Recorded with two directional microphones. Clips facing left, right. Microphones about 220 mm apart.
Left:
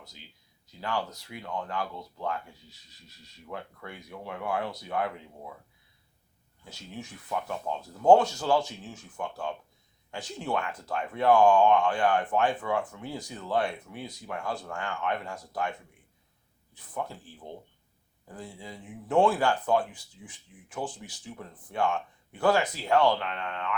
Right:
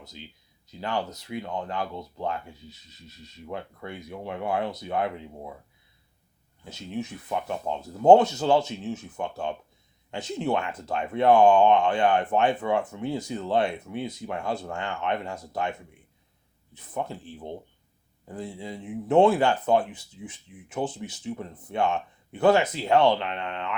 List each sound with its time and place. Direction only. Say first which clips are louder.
0.7 s speech: right 3 dB; 20° right (ahead or behind)
6.7 s speech: right 9 dB; 20° right (ahead or behind)
16.7 s speech: right 4 dB; 25° right (ahead or behind)